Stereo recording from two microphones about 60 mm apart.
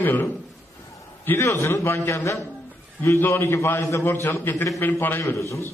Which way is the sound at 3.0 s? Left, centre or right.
Left.